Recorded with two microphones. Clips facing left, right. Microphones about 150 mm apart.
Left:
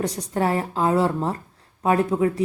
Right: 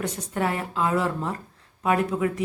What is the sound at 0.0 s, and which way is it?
Speech, 35° left (ahead or behind).